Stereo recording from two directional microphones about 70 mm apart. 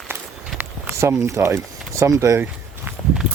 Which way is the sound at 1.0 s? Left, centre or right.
Right.